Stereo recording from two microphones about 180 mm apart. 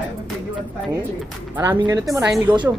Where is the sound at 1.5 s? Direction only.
15° right (ahead or behind).